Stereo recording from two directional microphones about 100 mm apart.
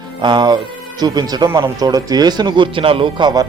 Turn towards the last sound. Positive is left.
turn(degrees=-45)  # may be behind; listen again after turning